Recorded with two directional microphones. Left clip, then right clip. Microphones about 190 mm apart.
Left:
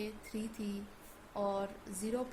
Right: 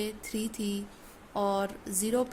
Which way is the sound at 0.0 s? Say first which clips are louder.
Right 8 dB; 50° right (ahead or behind).